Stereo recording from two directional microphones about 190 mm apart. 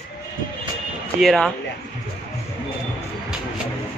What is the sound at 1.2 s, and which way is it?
Speech, centre (ahead or behind).